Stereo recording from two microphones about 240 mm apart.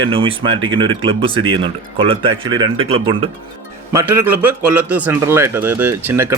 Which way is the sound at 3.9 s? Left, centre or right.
Centre.